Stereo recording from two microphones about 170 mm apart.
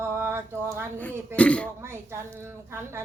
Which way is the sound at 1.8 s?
15° right (ahead or behind).